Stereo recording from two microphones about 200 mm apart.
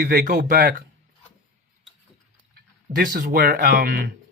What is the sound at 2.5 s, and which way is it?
Speech, 45° right (ahead or behind).